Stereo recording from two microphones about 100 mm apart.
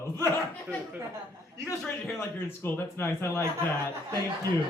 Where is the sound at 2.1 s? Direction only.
20° left (ahead or behind).